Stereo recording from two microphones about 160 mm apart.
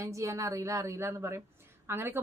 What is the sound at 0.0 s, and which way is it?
A woman's voice, 20° right (ahead or behind).